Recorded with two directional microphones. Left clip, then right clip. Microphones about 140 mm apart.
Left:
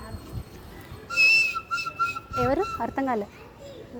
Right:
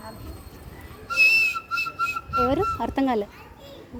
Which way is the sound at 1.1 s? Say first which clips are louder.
Right 1 dB; 30° right (ahead or behind).